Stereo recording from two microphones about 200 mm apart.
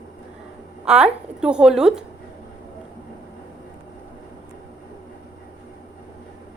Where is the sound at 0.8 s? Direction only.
5° right (ahead or behind).